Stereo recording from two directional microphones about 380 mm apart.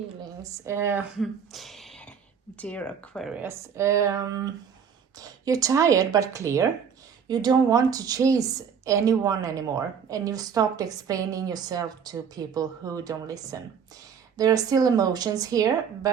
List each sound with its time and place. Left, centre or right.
0.2 s a woman's voice: centre